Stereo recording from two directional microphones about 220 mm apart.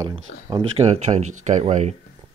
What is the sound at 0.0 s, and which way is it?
Speech, 20° right (ahead or behind).